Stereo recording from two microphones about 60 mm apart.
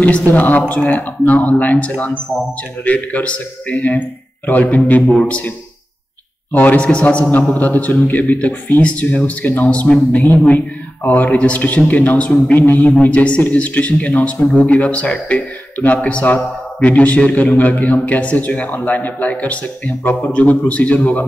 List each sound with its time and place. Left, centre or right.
0.0 s a man's voice: left
6.5 s a man's voice: left
12.8 s a man's voice: left